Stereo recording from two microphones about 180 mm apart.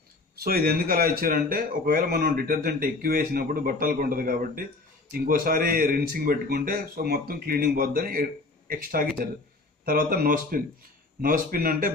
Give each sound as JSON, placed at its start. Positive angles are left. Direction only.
{"t": 0.4, "sound": "speech", "side_deg": -55}